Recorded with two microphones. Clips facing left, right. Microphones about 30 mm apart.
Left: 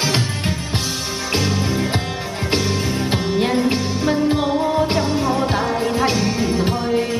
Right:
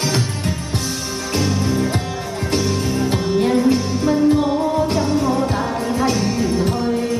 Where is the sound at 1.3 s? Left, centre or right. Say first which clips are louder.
Right 1 dB; left.